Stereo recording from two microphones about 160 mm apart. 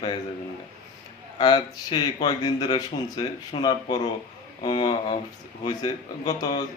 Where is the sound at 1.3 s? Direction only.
25° left (ahead or behind).